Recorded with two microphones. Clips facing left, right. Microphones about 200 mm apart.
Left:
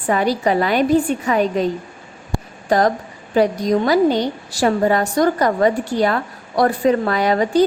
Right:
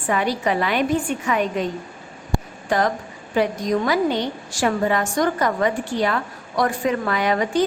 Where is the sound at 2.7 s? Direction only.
40° left (ahead or behind).